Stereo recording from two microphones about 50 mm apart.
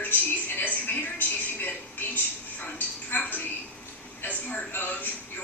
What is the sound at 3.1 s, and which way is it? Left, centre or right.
A woman's voice, left.